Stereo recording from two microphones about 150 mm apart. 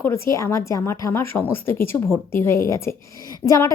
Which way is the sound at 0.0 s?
20° left (ahead or behind).